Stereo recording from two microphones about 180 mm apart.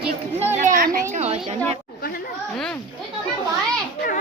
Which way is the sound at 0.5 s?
45° right (ahead or behind).